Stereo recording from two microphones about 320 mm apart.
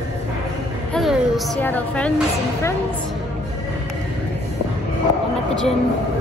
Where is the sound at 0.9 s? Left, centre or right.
Centre.